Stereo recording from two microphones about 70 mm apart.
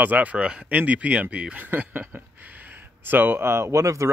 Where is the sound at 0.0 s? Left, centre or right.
Right.